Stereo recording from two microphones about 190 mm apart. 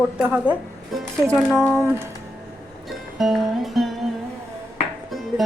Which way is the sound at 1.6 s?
10° right (ahead or behind).